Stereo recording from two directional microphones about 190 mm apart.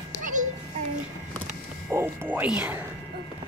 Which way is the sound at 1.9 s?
15° right (ahead or behind).